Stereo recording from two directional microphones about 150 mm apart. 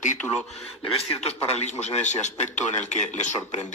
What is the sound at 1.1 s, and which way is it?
A man's voice, 45° left (ahead or behind).